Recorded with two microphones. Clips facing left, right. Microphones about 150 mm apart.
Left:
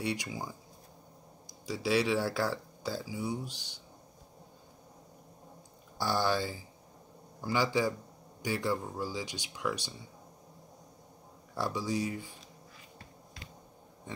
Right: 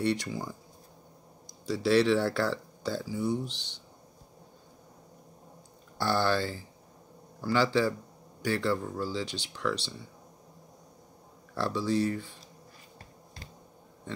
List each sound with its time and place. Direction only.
0.0 s speech: 10° left (ahead or behind)
5.9 s speech: 15° left (ahead or behind)
11.5 s speech: 15° left (ahead or behind)